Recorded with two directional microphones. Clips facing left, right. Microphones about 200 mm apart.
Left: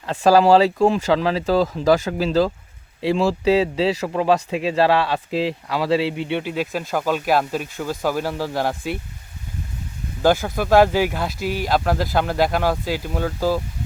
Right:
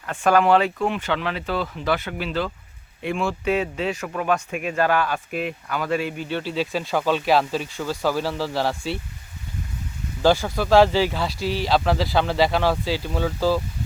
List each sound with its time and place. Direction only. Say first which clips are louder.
0.2 s speech: left 4 dB; 30° left (ahead or behind); by 9.0 s 15° left (ahead or behind)
10.2 s speech: left 1 dB; 15° left (ahead or behind)